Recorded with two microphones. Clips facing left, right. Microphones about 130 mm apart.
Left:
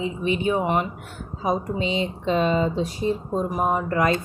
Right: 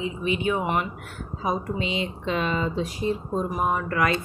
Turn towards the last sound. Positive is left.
turn(degrees=35)  # may be behind; listen again after turning